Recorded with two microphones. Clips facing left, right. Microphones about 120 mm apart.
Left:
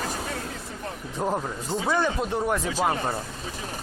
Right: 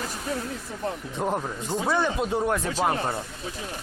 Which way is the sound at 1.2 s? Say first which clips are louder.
Left 1 dB; centre (ahead or behind).